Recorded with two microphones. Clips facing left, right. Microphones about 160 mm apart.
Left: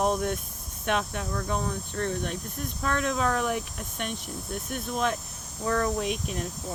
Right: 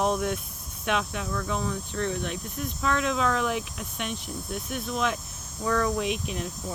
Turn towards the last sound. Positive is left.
turn(degrees=45)  # may be behind; listen again after turning